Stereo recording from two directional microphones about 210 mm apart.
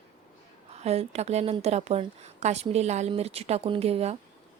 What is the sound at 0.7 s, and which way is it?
Speech, 30° right (ahead or behind).